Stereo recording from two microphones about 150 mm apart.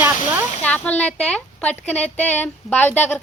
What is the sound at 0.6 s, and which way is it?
A woman's voice, 10° left (ahead or behind).